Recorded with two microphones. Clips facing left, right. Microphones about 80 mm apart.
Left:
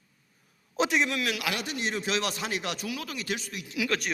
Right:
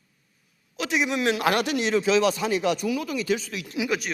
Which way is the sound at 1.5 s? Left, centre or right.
Right.